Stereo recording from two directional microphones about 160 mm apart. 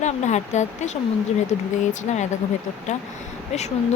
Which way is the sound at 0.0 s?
45° left (ahead or behind).